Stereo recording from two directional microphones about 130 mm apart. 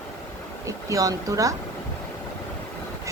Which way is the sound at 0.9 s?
25° right (ahead or behind).